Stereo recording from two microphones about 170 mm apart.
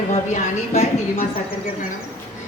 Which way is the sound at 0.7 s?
40° left (ahead or behind).